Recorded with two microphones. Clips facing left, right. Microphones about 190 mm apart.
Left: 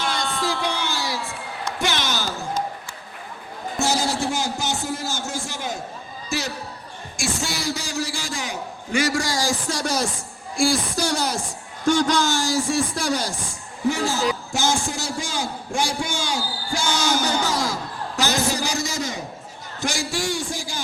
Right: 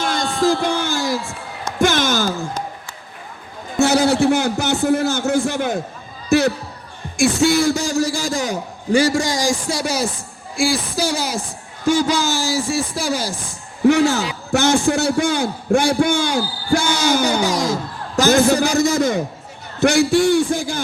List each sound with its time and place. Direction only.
0.0 s music: 45° right (ahead or behind)
3.8 s a man's voice: 65° right (ahead or behind); by 13.3 s 5° right (ahead or behind)
13.8 s a man's voice: 65° right (ahead or behind)
17.4 s music: 15° right (ahead or behind)
18.2 s a man's voice: 50° right (ahead or behind)